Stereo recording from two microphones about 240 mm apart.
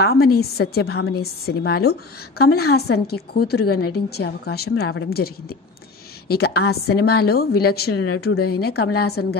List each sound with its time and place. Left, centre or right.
0.0 s a woman's voice: left